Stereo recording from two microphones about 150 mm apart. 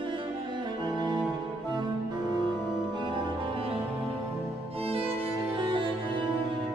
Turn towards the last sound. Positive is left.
turn(degrees=-35)  # may be behind; listen again after turning